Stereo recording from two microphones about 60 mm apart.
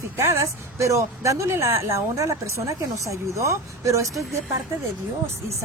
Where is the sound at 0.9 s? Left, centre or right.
Right.